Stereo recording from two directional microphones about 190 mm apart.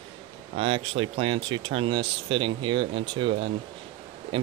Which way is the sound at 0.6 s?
30° right (ahead or behind).